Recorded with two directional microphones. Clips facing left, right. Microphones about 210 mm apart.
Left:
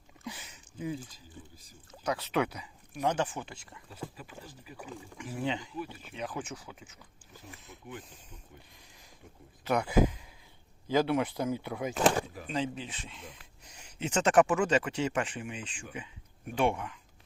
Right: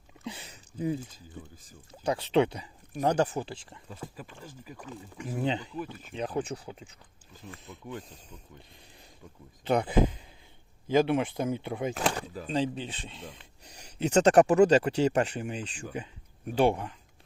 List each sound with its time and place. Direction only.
0.3 s a sound: 30° right (ahead or behind)
1.9 s speech: 30° right (ahead or behind)
3.0 s speech: 40° right (ahead or behind)
5.1 s speech: 40° right (ahead or behind)
9.6 s speech: 30° right (ahead or behind)